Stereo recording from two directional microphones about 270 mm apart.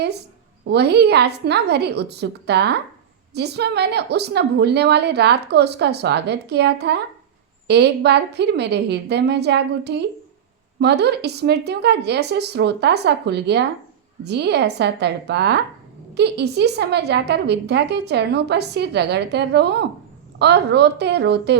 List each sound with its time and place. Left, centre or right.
0.6 s a woman's voice: right